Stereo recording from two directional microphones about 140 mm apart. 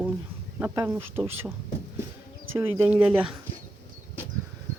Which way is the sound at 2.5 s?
20° right (ahead or behind).